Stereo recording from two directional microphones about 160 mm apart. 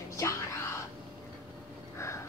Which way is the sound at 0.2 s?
20° left (ahead or behind).